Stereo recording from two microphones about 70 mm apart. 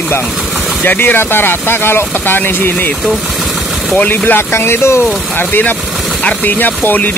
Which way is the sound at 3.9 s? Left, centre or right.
Left.